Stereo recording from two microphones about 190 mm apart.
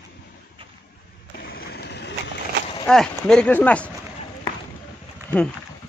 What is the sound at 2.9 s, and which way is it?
Speech, 5° left (ahead or behind).